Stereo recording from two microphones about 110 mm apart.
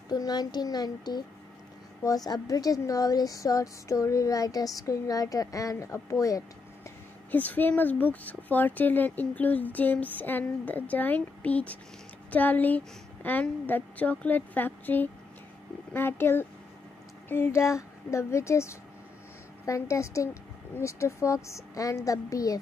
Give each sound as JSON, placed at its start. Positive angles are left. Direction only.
{"t": 0.1, "sound": "a woman's voice", "side_deg": 35}
{"t": 7.2, "sound": "a woman's voice", "side_deg": 15}